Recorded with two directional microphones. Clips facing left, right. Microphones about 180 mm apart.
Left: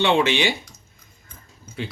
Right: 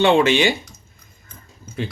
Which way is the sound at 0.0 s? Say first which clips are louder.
Right 4 dB; 45° right (ahead or behind).